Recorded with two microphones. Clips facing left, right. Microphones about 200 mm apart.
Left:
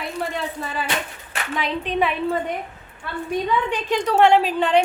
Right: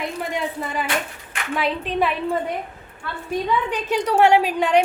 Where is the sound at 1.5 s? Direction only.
5° right (ahead or behind).